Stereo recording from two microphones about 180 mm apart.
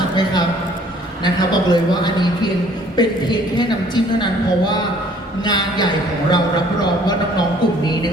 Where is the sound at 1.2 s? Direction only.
25° left (ahead or behind).